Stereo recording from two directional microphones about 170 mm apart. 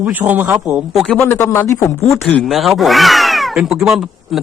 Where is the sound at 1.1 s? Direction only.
15° left (ahead or behind).